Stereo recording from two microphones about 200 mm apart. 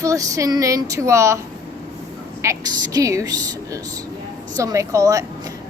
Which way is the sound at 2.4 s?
15° right (ahead or behind).